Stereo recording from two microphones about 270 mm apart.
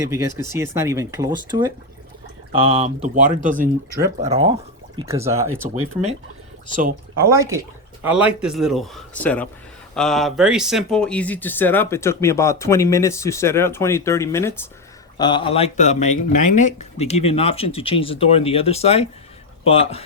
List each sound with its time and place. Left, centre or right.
0.0 s speech: centre; by 3.7 s right
4.3 s speech: centre
5.6 s speech: right
7.3 s speech: centre; by 20.0 s left